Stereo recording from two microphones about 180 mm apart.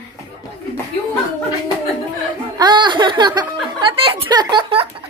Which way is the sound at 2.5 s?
25° right (ahead or behind).